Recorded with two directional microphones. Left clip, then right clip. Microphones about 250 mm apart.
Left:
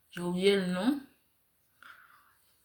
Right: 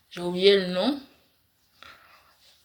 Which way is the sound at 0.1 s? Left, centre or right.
Centre.